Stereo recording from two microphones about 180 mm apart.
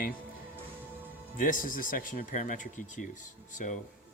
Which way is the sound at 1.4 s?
50° left (ahead or behind).